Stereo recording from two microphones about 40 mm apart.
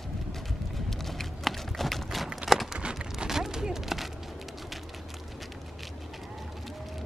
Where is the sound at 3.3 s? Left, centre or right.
Centre.